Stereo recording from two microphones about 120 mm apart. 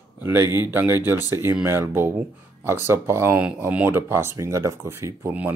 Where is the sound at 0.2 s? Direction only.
20° right (ahead or behind).